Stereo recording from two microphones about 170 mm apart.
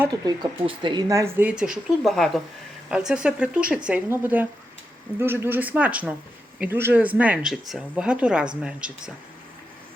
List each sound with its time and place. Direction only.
0.1 s speech: 30° right (ahead or behind); by 9.1 s 5° right (ahead or behind)